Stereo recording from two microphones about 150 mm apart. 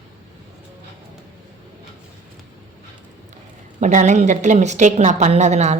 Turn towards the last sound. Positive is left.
turn(degrees=-50)  # may be behind; listen again after turning